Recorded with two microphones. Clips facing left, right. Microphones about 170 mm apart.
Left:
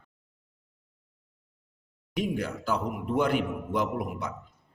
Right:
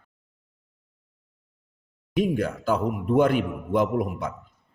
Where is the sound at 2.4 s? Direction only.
50° right (ahead or behind).